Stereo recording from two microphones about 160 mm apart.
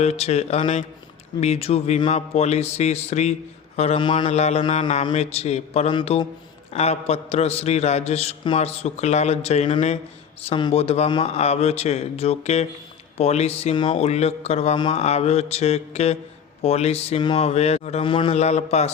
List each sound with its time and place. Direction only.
0.0 s a man's voice: 40° left (ahead or behind)